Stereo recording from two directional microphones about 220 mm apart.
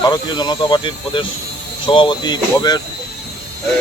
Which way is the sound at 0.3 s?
20° left (ahead or behind).